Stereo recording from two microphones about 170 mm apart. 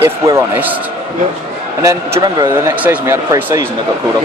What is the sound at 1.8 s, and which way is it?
Speech, 15° right (ahead or behind).